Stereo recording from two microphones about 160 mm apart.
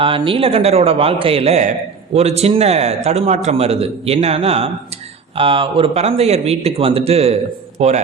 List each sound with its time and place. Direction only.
0.0 s a man's voice: 35° right (ahead or behind)